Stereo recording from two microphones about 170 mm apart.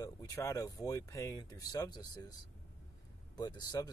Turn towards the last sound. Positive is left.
turn(degrees=25)  # may be behind; listen again after turning